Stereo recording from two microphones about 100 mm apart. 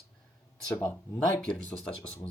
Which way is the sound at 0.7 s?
20° left (ahead or behind).